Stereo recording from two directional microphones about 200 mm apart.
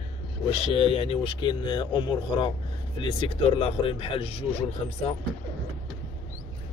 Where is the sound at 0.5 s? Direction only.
30° left (ahead or behind).